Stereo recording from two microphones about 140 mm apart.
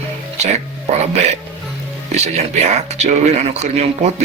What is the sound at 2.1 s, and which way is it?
Speech, 55° right (ahead or behind).